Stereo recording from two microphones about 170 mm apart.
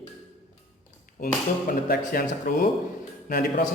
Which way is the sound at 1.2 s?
60° left (ahead or behind).